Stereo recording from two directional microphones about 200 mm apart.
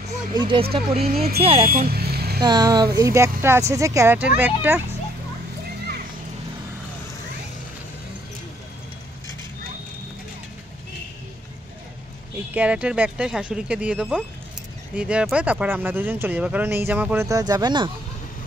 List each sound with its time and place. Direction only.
0.3 s speech: 25° right (ahead or behind)
1.9 s vehicle: 50° right (ahead or behind)
2.4 s speech: 20° right (ahead or behind)
12.5 s speech: 5° right (ahead or behind); by 17.9 s 20° right (ahead or behind)